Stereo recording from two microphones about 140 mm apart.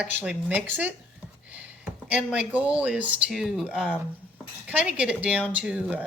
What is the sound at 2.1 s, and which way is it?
Speech, 10° right (ahead or behind).